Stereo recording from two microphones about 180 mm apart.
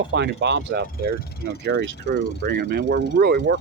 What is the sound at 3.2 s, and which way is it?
Speech, 65° right (ahead or behind).